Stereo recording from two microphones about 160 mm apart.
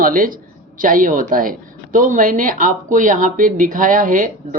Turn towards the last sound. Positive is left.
turn(degrees=-55)  # may be behind; listen again after turning